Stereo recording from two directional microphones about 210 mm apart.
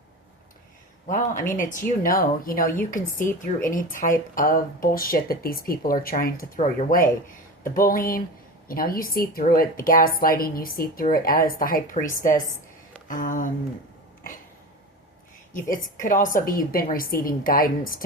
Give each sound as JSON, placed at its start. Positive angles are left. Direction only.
{"t": 1.0, "sound": "a woman's voice", "side_deg": 40}
{"t": 15.7, "sound": "a woman's voice", "side_deg": 40}